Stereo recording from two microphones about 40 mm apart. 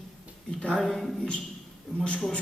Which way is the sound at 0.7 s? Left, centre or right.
Centre.